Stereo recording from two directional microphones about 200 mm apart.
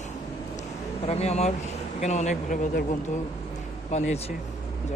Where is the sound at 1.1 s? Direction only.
30° left (ahead or behind).